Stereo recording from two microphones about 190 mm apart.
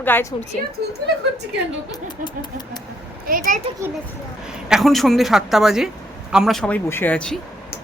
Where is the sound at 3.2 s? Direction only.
45° right (ahead or behind).